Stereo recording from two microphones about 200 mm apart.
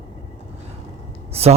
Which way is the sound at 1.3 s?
30° right (ahead or behind).